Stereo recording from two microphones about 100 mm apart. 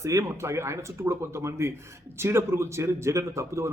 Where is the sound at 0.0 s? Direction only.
30° right (ahead or behind).